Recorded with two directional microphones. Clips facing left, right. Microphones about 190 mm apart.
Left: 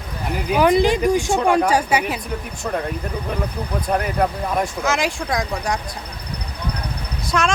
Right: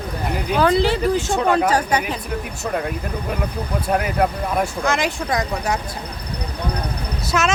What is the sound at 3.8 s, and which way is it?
Speech, 5° right (ahead or behind).